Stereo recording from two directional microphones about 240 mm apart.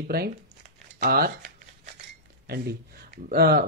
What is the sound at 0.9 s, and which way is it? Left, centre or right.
Scissors, right.